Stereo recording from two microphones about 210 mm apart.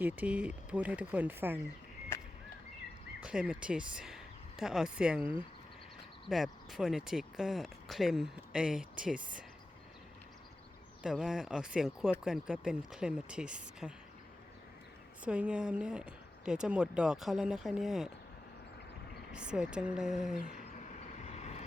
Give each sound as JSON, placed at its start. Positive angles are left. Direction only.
{"t": 0.0, "sound": "speech", "side_deg": -5}
{"t": 3.2, "sound": "speech", "side_deg": -5}
{"t": 11.0, "sound": "speech", "side_deg": 0}
{"t": 15.2, "sound": "speech", "side_deg": -5}
{"t": 19.3, "sound": "speech", "side_deg": -5}
{"t": 20.4, "sound": "vehicle", "side_deg": 40}